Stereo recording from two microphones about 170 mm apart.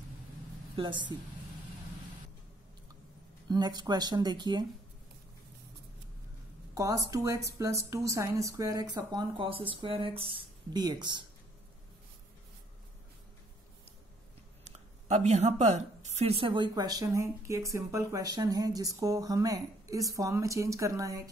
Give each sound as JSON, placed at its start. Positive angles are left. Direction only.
{"t": 0.7, "sound": "a woman's voice", "side_deg": -30}
{"t": 3.4, "sound": "a woman's voice", "side_deg": -25}
{"t": 6.7, "sound": "a woman's voice", "side_deg": -20}
{"t": 14.6, "sound": "a woman's voice", "side_deg": -40}